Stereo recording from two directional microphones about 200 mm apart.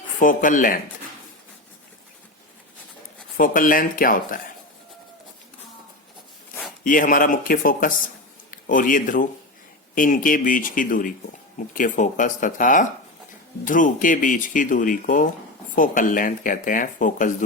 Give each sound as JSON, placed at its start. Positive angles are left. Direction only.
{"t": 0.2, "sound": "speech", "side_deg": 40}
{"t": 3.3, "sound": "speech", "side_deg": 45}
{"t": 6.8, "sound": "speech", "side_deg": 45}